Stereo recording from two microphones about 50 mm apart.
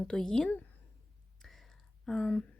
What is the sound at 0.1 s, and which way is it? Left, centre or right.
Speech, centre.